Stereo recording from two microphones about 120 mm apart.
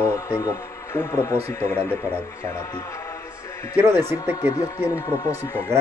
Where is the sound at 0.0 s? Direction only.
25° left (ahead or behind).